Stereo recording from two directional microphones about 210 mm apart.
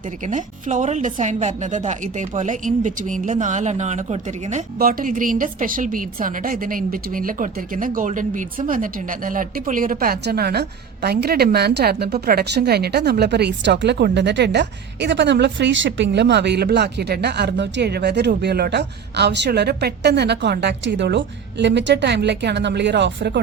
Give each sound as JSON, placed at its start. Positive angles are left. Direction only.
{"t": 0.3, "sound": "a woman's voice", "side_deg": -35}